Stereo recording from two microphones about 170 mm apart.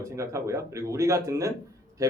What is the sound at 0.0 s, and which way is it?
A man's voice, 15° right (ahead or behind).